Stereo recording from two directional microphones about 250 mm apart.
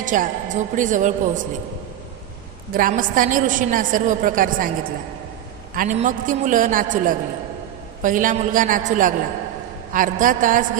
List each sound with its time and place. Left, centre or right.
0.0 s a woman's voice: right
2.7 s a woman's voice: right
5.8 s a woman's voice: right